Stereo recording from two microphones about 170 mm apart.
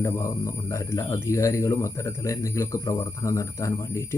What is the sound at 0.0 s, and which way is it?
Speech, 20° left (ahead or behind).